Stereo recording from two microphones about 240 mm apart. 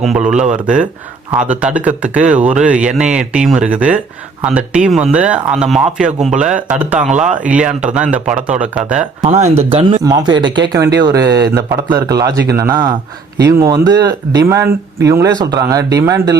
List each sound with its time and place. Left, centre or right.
0.0 s speech: centre
9.2 s speech: right
10.0 s speech: centre